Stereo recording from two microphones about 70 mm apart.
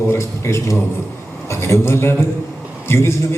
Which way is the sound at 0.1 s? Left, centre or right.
Left.